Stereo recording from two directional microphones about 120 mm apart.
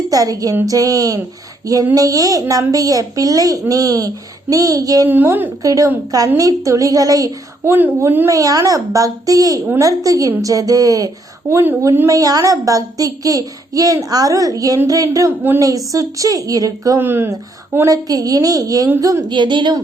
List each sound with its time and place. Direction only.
0.1 s speech: 30° right (ahead or behind)
5.0 s a woman's voice: 15° right (ahead or behind)
5.6 s speech: 30° right (ahead or behind)
15.3 s a woman's voice: 15° right (ahead or behind)
15.9 s speech: 30° right (ahead or behind)
17.0 s a woman's voice: 15° right (ahead or behind)
17.8 s speech: 30° right (ahead or behind)
19.3 s speech: 40° right (ahead or behind)